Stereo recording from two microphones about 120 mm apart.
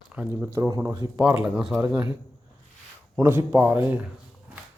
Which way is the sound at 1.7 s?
15° right (ahead or behind).